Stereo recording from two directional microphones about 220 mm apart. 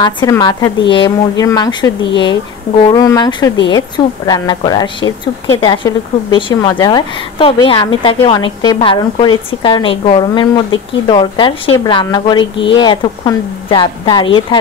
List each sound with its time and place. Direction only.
0.0 s a woman's voice: 20° left (ahead or behind)